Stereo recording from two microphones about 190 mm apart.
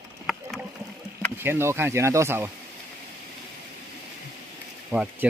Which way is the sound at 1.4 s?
10° right (ahead or behind).